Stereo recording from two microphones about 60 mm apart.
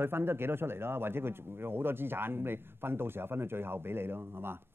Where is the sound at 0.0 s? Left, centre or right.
Right.